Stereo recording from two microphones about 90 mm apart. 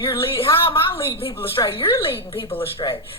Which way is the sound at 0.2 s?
85° left.